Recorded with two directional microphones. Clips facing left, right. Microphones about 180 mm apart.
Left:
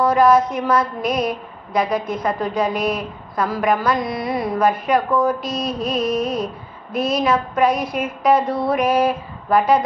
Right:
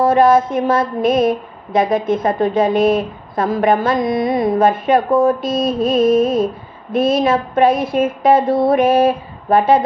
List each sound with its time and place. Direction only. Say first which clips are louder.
0.0 s a woman's voice: right 3 dB; 25° right (ahead or behind)